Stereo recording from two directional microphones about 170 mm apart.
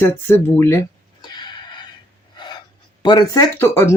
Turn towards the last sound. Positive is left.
turn(degrees=15)  # may be behind; listen again after turning